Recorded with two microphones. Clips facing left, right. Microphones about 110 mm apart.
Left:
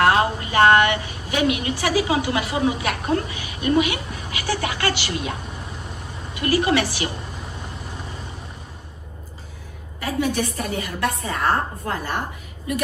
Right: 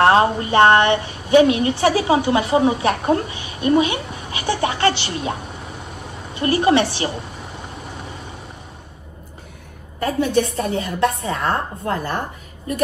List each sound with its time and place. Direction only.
0.0 s a woman's voice: 30° right (ahead or behind)
10.2 s a woman's voice: 25° right (ahead or behind)